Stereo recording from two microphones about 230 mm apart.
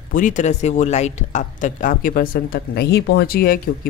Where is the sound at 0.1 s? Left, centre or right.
Left.